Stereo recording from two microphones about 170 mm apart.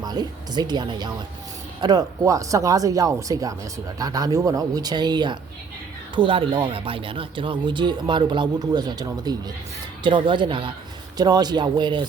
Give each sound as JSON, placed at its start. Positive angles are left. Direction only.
{"t": 0.0, "sound": "speech", "side_deg": -25}